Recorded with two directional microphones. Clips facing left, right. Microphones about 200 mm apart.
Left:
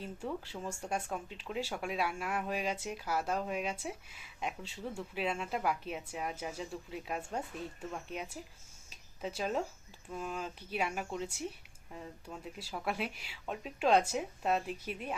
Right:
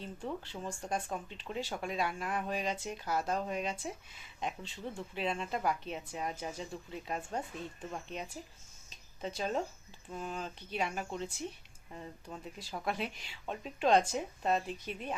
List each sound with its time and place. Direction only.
0.0 s speech: 5° left (ahead or behind)
8.9 s a sound: 5° left (ahead or behind)
10.1 s speech: centre (ahead or behind)